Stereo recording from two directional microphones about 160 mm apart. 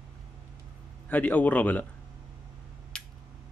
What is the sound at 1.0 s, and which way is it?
Speech, 10° left (ahead or behind).